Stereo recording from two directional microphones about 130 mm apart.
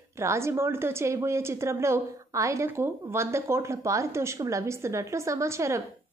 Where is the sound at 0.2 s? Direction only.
20° right (ahead or behind).